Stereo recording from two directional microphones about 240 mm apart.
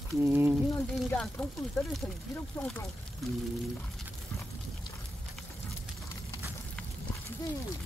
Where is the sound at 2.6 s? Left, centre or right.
Centre.